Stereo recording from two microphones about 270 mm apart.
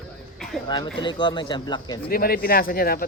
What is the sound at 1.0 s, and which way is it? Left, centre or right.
Speech, centre.